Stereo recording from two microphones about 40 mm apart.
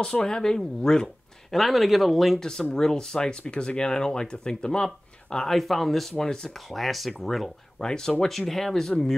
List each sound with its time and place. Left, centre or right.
0.0 s speech: centre
1.5 s speech: centre
2.4 s speech: centre
5.6 s speech: centre
6.2 s speech: centre
6.5 s speech: centre
7.8 s speech: centre